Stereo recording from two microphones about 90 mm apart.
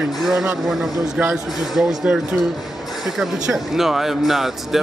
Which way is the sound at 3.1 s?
5° right (ahead or behind).